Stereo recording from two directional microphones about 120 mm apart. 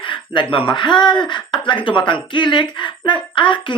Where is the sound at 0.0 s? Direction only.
45° left (ahead or behind).